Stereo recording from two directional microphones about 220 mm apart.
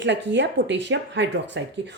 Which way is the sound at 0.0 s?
55° right (ahead or behind).